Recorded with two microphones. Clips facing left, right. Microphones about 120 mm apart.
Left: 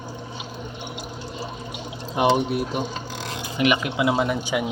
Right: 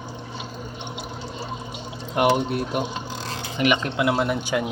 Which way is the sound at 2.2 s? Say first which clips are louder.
Even; 15° left (ahead or behind).